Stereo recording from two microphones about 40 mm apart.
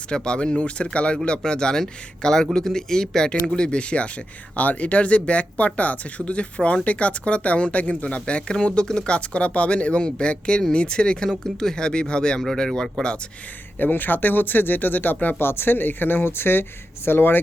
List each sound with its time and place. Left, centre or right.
0.1 s speech: left
4.5 s speech: left
13.7 s speech: left
15.4 s speech: left